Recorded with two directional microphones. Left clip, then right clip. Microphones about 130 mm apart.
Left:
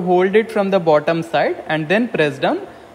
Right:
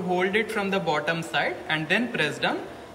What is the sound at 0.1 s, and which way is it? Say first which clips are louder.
A man's voice: left 10 dB; 55° left (ahead or behind).